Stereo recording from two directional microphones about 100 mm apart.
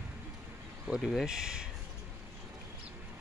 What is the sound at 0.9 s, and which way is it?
Speech, 5° right (ahead or behind).